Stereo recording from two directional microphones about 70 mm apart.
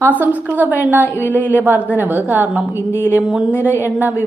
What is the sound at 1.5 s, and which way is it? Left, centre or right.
A woman's voice, right.